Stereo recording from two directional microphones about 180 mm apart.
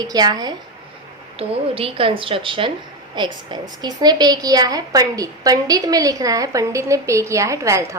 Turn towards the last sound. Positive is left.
turn(degrees=-15)  # may be behind; listen again after turning